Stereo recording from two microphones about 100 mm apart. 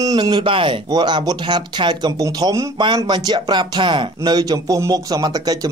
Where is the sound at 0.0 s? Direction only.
45° right (ahead or behind); by 0.7 s 60° right (ahead or behind).